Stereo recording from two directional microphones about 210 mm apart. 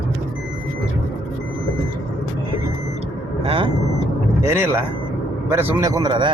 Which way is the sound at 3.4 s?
25° right (ahead or behind).